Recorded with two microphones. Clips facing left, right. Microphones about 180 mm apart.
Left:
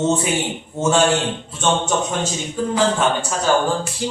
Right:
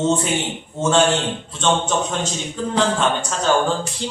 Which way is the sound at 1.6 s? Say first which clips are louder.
Even; 10° left (ahead or behind).